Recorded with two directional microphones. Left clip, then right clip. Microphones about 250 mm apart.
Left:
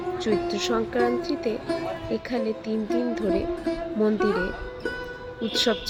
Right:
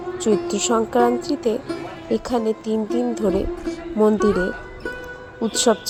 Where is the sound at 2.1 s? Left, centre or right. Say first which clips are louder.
Right 9 dB; centre.